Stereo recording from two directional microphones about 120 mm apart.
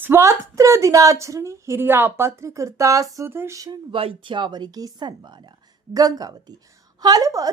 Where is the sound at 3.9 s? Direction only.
50° right (ahead or behind).